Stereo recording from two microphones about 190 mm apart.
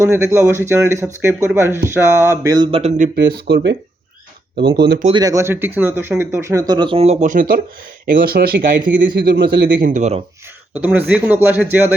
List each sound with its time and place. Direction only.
0.0 s speech: 15° right (ahead or behind)
2.7 s speech: 35° right (ahead or behind)
3.2 s speech: 60° right (ahead or behind)
4.8 s speech: 55° right (ahead or behind)
5.0 s speech: 20° right (ahead or behind)
10.8 s speech: 10° right (ahead or behind)